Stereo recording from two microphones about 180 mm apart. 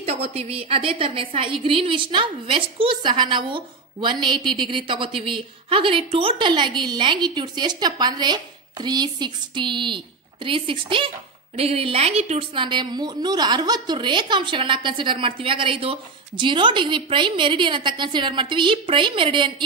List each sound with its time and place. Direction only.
0.0 s a woman's voice: 35° right (ahead or behind)